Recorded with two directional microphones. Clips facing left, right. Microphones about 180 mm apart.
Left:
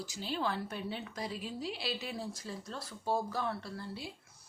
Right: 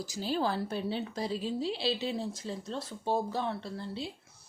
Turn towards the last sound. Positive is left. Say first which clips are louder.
# right 5 dB
turn(degrees=-25)  # may be behind; listen again after turning